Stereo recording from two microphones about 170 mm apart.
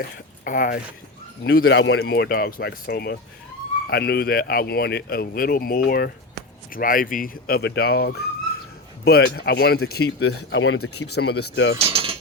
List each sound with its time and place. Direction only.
0.4 s speech: 55° left (ahead or behind)
1.5 s speech: 90° left
11.8 s keys jangling: 35° right (ahead or behind)